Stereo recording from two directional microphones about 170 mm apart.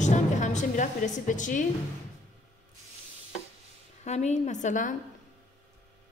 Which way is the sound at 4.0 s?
40° left (ahead or behind).